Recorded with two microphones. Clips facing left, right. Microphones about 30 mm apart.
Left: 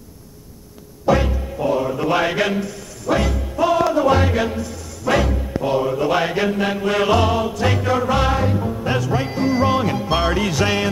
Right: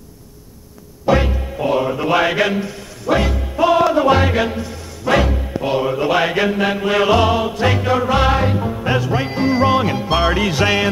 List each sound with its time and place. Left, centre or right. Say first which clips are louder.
1.0 s music: right 2 dB; right
8.3 s music: right 3 dB; right